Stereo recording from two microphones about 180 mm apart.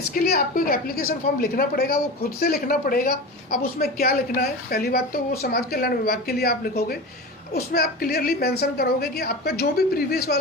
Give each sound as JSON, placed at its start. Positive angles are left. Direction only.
{"t": 0.1, "sound": "a woman's voice", "side_deg": 55}